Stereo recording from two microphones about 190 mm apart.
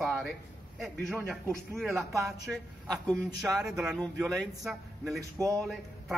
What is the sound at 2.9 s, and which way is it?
Speech, 20° right (ahead or behind).